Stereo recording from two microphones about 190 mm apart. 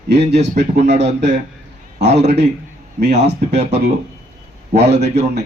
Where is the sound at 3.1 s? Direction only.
35° right (ahead or behind).